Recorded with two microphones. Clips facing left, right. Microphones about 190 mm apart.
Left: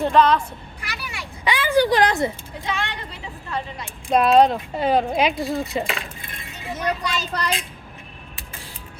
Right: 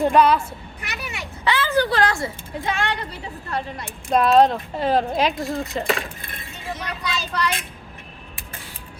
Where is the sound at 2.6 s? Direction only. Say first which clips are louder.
Right 2 dB; 50° right (ahead or behind).